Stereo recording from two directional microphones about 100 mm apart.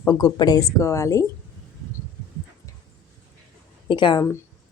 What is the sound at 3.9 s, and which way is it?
Speech, 50° left (ahead or behind).